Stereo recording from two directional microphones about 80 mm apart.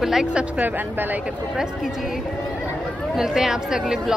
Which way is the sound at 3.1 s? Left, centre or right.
Centre.